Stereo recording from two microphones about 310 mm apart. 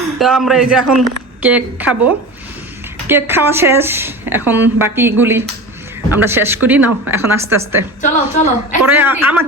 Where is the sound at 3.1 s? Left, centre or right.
Centre.